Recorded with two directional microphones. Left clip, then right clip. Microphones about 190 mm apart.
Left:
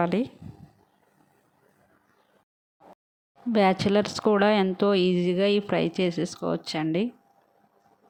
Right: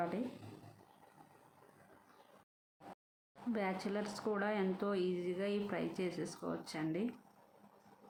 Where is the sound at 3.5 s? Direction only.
50° left (ahead or behind).